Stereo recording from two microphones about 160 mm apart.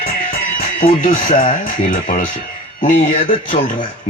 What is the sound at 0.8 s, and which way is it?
Speech, 60° left (ahead or behind).